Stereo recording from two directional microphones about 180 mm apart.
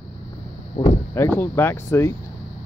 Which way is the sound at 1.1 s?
15° left (ahead or behind).